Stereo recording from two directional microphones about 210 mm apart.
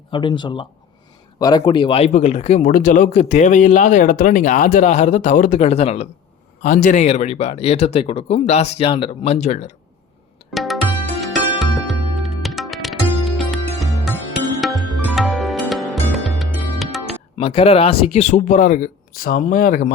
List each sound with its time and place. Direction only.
0.1 s speech: 20° left (ahead or behind)
10.5 s music: centre (ahead or behind)
17.4 s speech: 30° left (ahead or behind)